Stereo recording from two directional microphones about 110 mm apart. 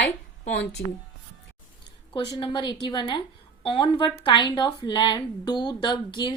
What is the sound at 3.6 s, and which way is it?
A woman's voice, 55° left (ahead or behind).